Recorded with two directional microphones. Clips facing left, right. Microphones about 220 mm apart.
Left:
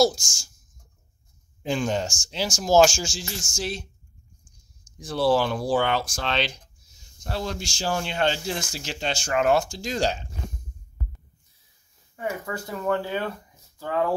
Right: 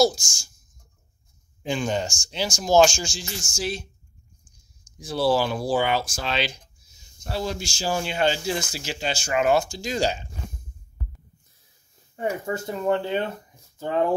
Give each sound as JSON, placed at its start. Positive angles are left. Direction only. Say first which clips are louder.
{"t": 0.0, "sound": "speech", "louder": "even", "side_deg": 0}
{"t": 1.6, "sound": "speech", "louder": "even", "side_deg": 0}
{"t": 5.0, "sound": "speech", "louder": "even", "side_deg": -5}
{"t": 12.2, "sound": "speech", "louder": "right 4 dB", "side_deg": -25}